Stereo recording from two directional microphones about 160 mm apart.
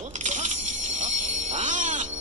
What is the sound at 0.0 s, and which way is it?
Music, 50° right (ahead or behind).